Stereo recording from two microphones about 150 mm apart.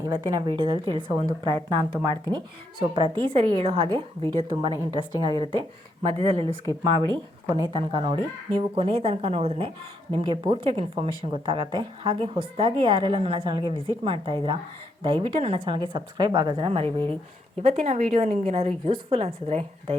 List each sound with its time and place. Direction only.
0.0 s a woman's voice: 30° right (ahead or behind)
6.0 s speech: 40° right (ahead or behind)
7.4 s a woman's voice: 25° right (ahead or behind); by 20.0 s 45° right (ahead or behind)